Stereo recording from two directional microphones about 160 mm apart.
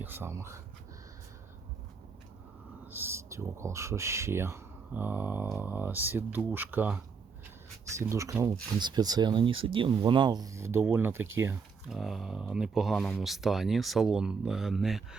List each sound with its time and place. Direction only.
0.0 s speech: 15° right (ahead or behind)
2.8 s speech: 15° right (ahead or behind)
8.1 s speech: 20° right (ahead or behind)
11.9 s speech: centre (ahead or behind)